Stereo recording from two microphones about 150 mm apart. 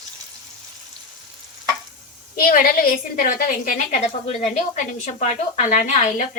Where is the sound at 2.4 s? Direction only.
70° left (ahead or behind).